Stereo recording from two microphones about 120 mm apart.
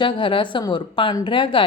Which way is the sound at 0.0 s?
45° left (ahead or behind).